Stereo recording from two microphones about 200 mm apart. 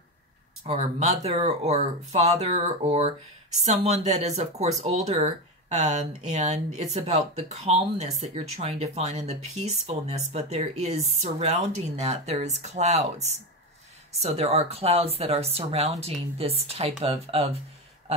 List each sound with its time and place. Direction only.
0.7 s a woman's voice: 35° right (ahead or behind)